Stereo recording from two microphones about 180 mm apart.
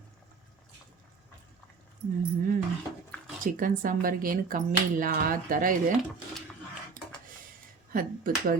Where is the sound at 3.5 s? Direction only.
50° right (ahead or behind).